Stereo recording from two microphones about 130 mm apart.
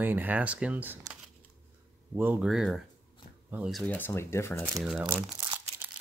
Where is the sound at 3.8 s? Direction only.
10° left (ahead or behind).